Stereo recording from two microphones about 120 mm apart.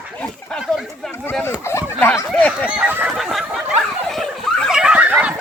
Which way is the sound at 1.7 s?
20° left (ahead or behind).